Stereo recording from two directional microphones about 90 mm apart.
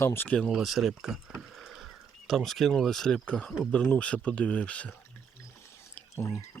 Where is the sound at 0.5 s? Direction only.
Centre (ahead or behind).